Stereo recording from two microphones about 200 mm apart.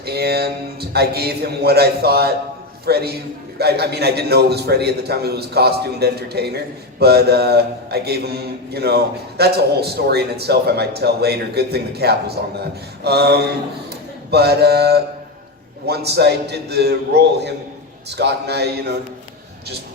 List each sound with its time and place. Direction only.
0.0 s a man's voice: 55° right (ahead or behind)